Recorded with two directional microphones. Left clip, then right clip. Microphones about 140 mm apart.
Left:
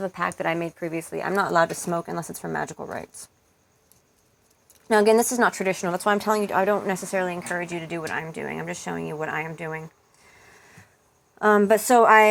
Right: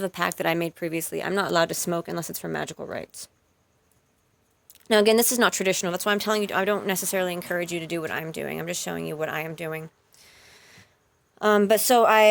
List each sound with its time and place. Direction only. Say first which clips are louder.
0.3 s speech: right 1 dB; 90° right
0.8 s speech: right 1 dB; 50° right (ahead or behind)
1.5 s a woman's voice: left 1 dB; 30° right (ahead or behind)
4.7 s a woman's voice: left 1 dB; 30° right (ahead or behind)
5.9 s a woman's voice: left 2 dB; 20° right (ahead or behind)
6.1 s speech: left 2 dB; 50° right (ahead or behind)
6.4 s a woman's voice: left 2 dB; 15° right (ahead or behind)
7.1 s speech: even; 50° right (ahead or behind)
10.4 s a sound: left 2 dB; 30° right (ahead or behind)
11.3 s a woman's voice: left 2 dB; 10° right (ahead or behind)